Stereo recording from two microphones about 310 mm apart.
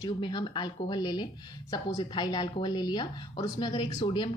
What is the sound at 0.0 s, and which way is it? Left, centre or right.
Speech, centre.